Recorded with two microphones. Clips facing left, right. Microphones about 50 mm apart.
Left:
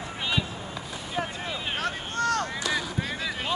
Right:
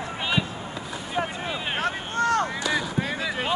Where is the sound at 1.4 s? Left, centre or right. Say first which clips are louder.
Right 3 dB; centre.